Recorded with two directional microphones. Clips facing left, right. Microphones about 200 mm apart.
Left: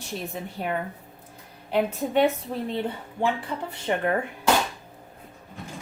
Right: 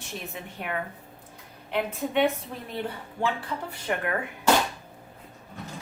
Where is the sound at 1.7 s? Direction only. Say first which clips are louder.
Left 4 dB; 40° left (ahead or behind).